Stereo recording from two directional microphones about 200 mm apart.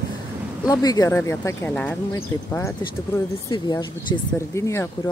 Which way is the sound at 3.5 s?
20° left (ahead or behind).